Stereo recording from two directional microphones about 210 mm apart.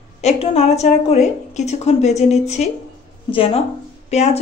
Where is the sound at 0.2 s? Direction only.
30° left (ahead or behind).